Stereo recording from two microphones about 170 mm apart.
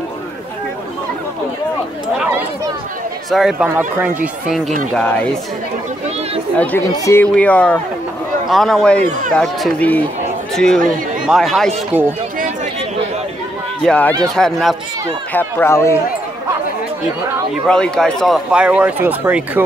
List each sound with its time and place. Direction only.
3.3 s speech: centre (ahead or behind)
6.5 s speech: 10° left (ahead or behind)
13.8 s speech: 10° left (ahead or behind)
15.3 s speech: 15° left (ahead or behind)
17.6 s speech: 5° left (ahead or behind); by 19.6 s 10° right (ahead or behind)